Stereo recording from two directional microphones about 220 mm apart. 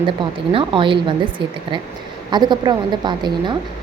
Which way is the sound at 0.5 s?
20° right (ahead or behind).